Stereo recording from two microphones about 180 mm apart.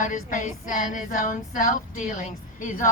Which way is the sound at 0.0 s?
45° left (ahead or behind).